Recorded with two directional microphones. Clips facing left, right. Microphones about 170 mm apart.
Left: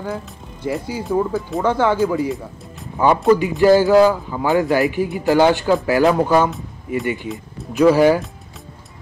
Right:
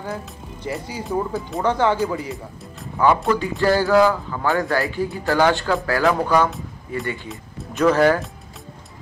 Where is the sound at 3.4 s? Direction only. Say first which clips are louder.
Left 6 dB; 15° left (ahead or behind).